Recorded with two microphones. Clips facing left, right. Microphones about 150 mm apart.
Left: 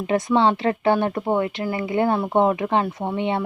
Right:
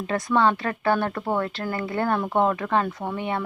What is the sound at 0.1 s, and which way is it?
Speech, 20° left (ahead or behind).